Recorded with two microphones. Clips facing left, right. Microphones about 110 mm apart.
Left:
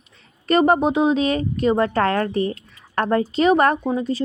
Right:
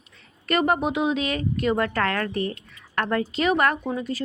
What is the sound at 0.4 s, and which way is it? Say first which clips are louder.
Speech: left 6 dB; 35° left (ahead or behind).